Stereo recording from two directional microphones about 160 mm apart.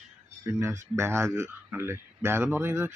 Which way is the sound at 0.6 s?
15° right (ahead or behind).